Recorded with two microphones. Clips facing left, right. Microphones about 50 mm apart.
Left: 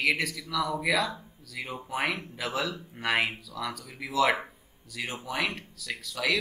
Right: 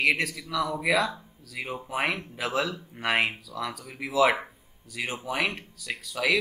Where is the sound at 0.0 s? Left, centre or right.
Centre.